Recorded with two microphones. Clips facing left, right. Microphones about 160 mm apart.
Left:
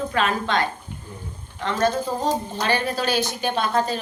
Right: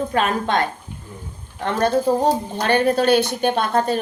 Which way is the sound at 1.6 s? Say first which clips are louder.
Right 4 dB; 55° right (ahead or behind).